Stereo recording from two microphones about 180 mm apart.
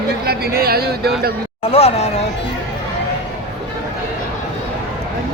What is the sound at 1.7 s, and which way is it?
Speech, 35° left (ahead or behind).